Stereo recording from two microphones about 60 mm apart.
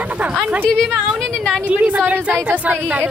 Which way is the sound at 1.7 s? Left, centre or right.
Right.